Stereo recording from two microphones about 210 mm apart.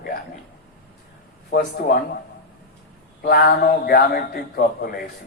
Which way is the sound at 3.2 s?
45° left (ahead or behind).